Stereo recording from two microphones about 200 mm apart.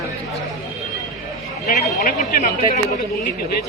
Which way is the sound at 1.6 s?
40° left (ahead or behind).